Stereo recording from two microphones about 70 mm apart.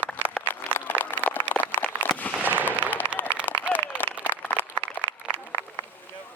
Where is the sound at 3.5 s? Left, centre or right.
Left.